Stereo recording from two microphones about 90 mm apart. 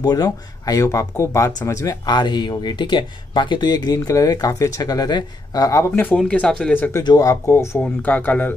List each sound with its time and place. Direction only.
0.0 s speech: 45° left (ahead or behind)
2.0 s speech: 55° left (ahead or behind); by 5.9 s 40° left (ahead or behind)
5.9 s speech: 20° left (ahead or behind)
6.7 s speech: 25° left (ahead or behind)
7.0 s speech: 45° left (ahead or behind)
7.8 s speech: 20° left (ahead or behind)